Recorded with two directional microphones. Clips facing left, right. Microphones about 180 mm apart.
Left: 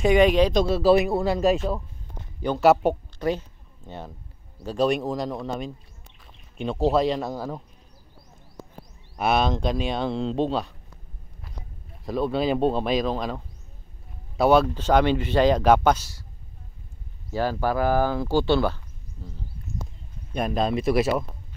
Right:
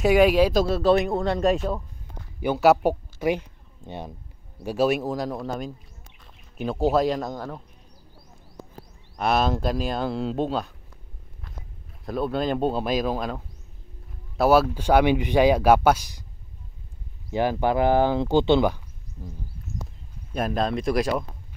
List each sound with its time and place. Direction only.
0.0 s speech: 5° right (ahead or behind)
3.3 s a sound: 15° right (ahead or behind)
4.6 s speech: 5° right (ahead or behind)
9.1 s speech: centre (ahead or behind)
12.0 s speech: centre (ahead or behind)
17.3 s speech: 20° right (ahead or behind)
20.3 s speech: centre (ahead or behind)